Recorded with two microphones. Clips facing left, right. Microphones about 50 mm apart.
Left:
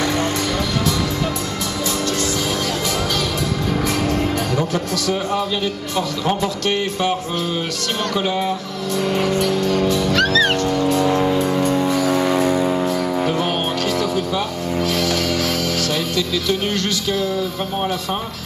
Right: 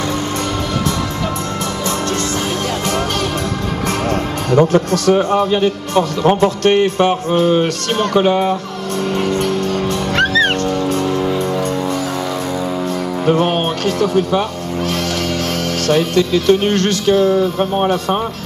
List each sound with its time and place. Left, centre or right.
4.1 s music: right
5.1 s speech: right
9.1 s music: right
10.1 s music: right
11.3 s music: centre
13.4 s speech: right
15.9 s speech: right